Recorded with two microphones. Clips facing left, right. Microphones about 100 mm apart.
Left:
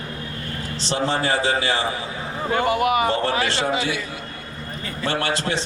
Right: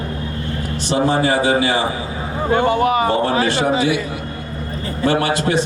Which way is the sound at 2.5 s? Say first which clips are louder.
Right 4 dB; 30° right (ahead or behind).